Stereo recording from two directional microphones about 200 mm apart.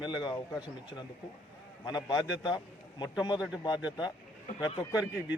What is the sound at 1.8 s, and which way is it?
A man's voice, 20° left (ahead or behind).